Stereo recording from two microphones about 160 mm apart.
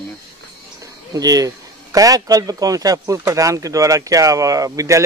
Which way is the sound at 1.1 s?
25° right (ahead or behind).